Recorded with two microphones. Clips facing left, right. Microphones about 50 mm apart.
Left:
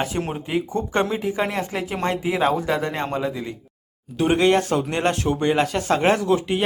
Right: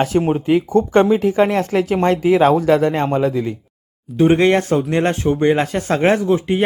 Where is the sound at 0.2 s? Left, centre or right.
Centre.